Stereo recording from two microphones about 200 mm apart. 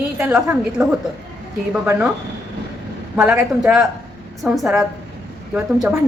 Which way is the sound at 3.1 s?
5° right (ahead or behind).